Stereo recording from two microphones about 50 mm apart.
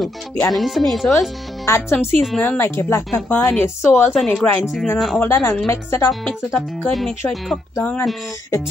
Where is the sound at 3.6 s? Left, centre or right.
Left.